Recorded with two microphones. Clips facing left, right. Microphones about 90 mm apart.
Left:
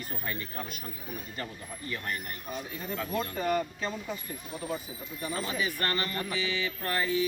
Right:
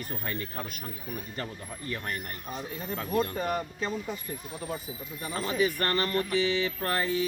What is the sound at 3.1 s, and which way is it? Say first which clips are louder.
Speech: right 5 dB; 40° right (ahead or behind).